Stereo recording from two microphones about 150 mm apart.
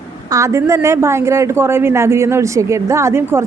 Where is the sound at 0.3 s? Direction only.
20° right (ahead or behind).